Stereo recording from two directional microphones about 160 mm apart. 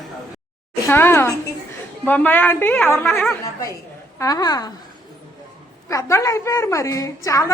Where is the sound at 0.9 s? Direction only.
15° left (ahead or behind).